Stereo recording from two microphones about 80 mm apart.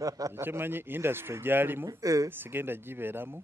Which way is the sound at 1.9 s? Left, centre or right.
Right.